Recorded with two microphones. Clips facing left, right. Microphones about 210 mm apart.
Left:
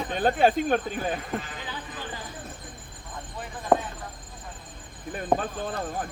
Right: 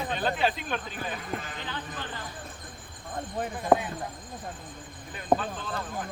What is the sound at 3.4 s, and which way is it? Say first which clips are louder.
Speech: right 8 dB; 45° right (ahead or behind).